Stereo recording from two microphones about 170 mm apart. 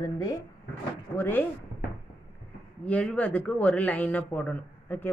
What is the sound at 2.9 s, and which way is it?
A woman's voice, 5° left (ahead or behind).